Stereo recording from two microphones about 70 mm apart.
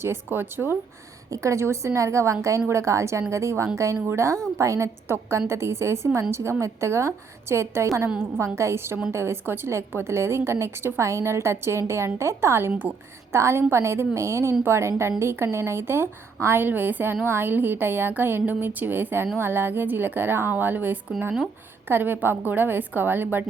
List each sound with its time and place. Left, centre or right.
0.0 s a woman's voice: right
1.3 s a woman's voice: right